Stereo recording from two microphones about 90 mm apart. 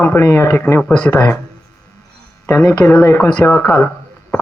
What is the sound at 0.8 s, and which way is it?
Speech, 20° left (ahead or behind).